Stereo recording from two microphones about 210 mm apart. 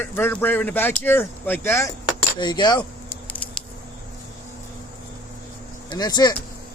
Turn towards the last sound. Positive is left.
turn(degrees=20)  # may be behind; listen again after turning